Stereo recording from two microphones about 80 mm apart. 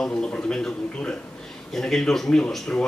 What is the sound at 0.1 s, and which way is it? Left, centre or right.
A man's voice, centre.